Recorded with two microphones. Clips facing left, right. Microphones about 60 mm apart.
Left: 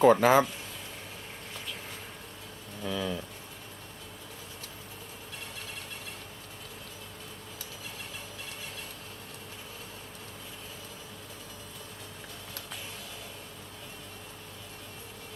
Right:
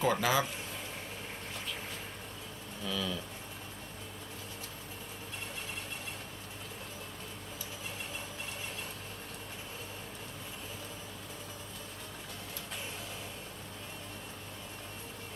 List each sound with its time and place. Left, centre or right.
0.0 s speech: left
2.8 s speech: left